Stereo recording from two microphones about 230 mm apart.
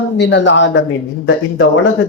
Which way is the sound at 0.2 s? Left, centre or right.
Left.